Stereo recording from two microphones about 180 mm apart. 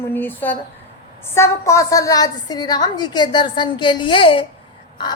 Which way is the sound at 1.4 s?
15° left (ahead or behind).